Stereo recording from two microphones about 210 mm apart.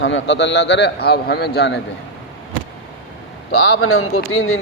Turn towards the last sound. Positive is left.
turn(degrees=70)  # may be behind; listen again after turning